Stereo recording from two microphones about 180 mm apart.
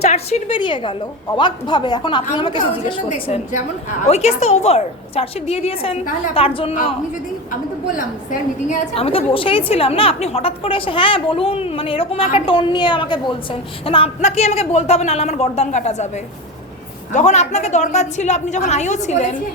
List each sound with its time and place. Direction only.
0.0 s a woman's voice: 35° left (ahead or behind)
3.1 s a woman's voice: 40° left (ahead or behind)
7.9 s a woman's voice: 45° left (ahead or behind)
9.0 s a woman's voice: 30° left (ahead or behind)